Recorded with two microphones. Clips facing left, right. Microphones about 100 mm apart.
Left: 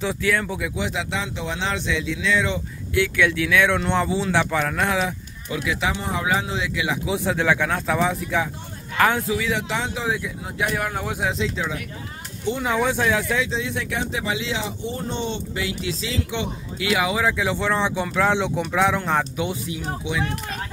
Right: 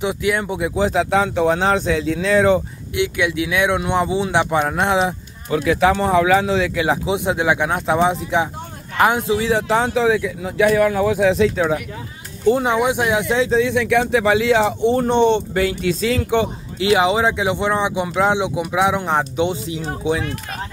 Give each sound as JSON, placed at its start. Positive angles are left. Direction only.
{"t": 0.0, "sound": "speech", "side_deg": -15}
{"t": 0.7, "sound": "speech", "side_deg": -40}
{"t": 2.9, "sound": "speech", "side_deg": -20}
{"t": 5.5, "sound": "speech", "side_deg": -45}
{"t": 5.9, "sound": "speech", "side_deg": -75}
{"t": 6.7, "sound": "speech", "side_deg": -45}
{"t": 7.1, "sound": "speech", "side_deg": -20}
{"t": 9.9, "sound": "speech", "side_deg": -75}
{"t": 11.2, "sound": "speech", "side_deg": -65}
{"t": 12.6, "sound": "speech", "side_deg": -15}
{"t": 13.5, "sound": "speech", "side_deg": -75}
{"t": 16.7, "sound": "speech", "side_deg": -30}